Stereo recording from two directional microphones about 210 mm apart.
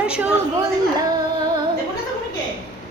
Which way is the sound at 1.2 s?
20° right (ahead or behind).